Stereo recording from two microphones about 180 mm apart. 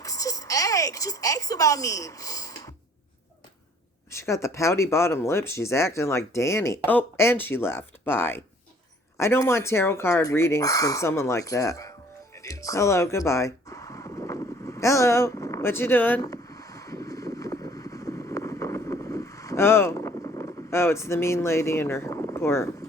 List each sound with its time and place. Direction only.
0.0 s speech: 20° left (ahead or behind)
4.1 s speech: 15° left (ahead or behind)
12.4 s a sound: 20° left (ahead or behind)